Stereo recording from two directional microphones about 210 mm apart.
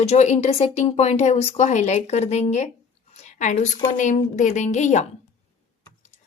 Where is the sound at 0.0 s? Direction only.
30° left (ahead or behind).